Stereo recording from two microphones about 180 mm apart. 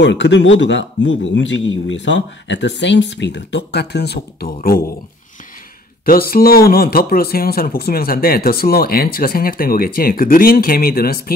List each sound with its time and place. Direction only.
0.0 s a man's voice: 80° left; by 4.8 s 50° left (ahead or behind)
6.0 s speech: 55° left (ahead or behind)